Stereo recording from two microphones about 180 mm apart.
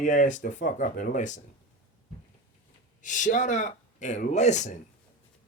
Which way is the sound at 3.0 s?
45° left (ahead or behind).